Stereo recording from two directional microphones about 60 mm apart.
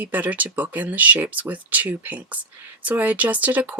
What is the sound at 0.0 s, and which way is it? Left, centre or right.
Speech, right.